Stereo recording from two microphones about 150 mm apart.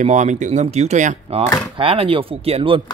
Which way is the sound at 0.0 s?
55° right (ahead or behind).